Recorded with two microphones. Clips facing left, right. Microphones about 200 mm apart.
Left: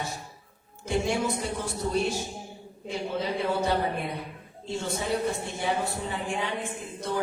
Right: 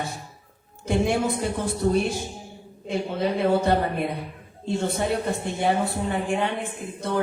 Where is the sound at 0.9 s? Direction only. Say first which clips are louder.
Right 4 dB; 60° right (ahead or behind).